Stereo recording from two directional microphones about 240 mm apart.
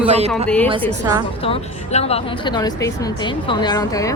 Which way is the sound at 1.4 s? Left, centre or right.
Left.